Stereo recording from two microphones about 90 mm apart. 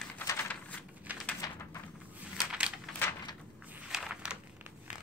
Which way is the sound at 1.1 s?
20° right (ahead or behind).